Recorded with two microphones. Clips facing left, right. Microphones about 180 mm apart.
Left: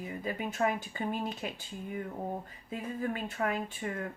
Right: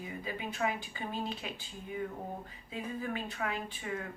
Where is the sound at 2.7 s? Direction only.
45° left (ahead or behind).